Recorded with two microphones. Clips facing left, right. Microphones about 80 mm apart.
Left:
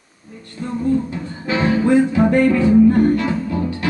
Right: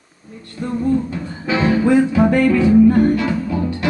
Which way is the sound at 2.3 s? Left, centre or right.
Centre.